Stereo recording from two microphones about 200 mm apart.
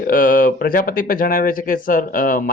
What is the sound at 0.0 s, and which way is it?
Speech, 45° left (ahead or behind).